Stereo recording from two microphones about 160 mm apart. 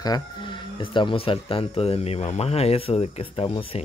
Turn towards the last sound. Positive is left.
turn(degrees=30)  # may be behind; listen again after turning